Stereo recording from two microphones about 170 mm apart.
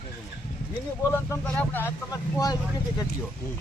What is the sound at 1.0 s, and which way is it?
Speech, 20° left (ahead or behind).